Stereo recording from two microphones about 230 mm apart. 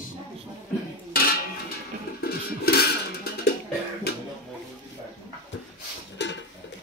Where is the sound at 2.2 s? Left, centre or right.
Left.